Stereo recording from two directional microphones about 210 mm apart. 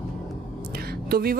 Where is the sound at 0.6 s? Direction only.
45° right (ahead or behind).